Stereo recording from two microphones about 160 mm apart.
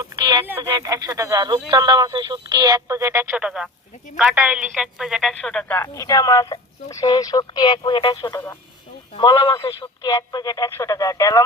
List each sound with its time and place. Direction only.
0.0 s a sound: 25° right (ahead or behind)
0.4 s speech: 15° right (ahead or behind); by 8.5 s 20° left (ahead or behind)
9.1 s speech: 30° left (ahead or behind)